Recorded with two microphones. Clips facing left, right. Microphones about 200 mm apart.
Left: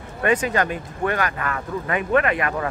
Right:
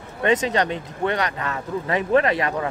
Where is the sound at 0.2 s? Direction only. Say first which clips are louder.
Right 1 dB; 25° right (ahead or behind).